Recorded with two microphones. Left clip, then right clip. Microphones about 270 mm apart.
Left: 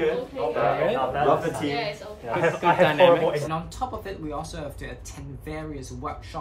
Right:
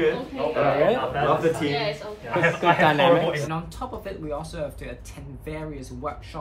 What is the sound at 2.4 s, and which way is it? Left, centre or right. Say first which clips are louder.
Mantra: right 1 dB; centre.